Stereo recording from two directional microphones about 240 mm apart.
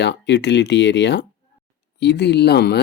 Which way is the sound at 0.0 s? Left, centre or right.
Left.